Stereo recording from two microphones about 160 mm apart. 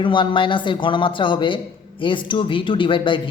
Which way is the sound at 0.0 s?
30° left (ahead or behind).